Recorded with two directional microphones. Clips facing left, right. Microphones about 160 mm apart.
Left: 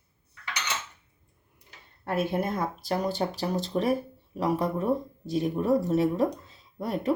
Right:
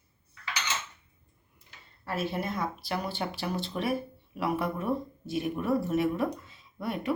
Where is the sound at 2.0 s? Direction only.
55° left (ahead or behind).